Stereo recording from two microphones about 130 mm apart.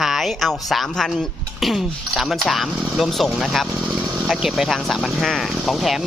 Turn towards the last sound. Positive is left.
turn(degrees=0)  # may be behind; listen again after turning